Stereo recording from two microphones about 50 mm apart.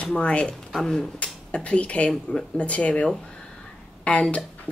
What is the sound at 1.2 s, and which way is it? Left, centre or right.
Speech, left.